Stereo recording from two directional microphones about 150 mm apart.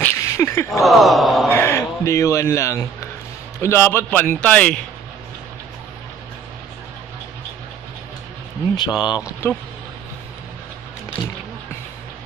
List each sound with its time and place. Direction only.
0.0 s speech: 15° left (ahead or behind)
0.7 s a sound: centre (ahead or behind)
1.5 s a man's voice: 15° left (ahead or behind)
8.7 s speech: 30° left (ahead or behind)